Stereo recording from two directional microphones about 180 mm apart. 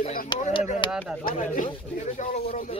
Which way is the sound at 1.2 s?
50° left (ahead or behind).